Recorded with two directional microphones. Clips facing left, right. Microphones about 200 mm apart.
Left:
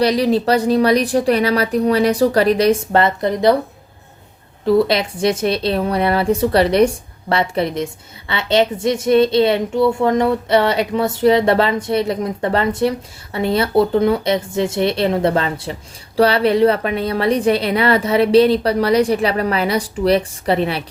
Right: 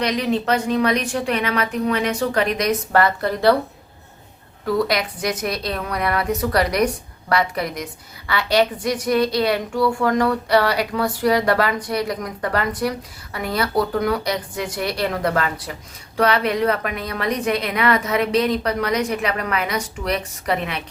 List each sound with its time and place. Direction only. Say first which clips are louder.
0.0 s a woman's voice: left 6 dB; 35° left (ahead or behind); by 3.5 s 20° left (ahead or behind)
4.6 s a woman's voice: left 6 dB; 25° left (ahead or behind)